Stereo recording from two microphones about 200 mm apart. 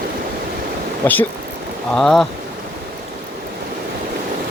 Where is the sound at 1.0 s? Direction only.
10° left (ahead or behind).